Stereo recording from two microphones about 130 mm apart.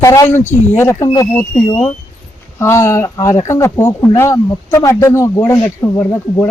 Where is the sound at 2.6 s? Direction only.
20° left (ahead or behind).